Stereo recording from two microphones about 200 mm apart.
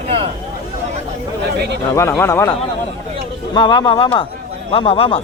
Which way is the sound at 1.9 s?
15° left (ahead or behind).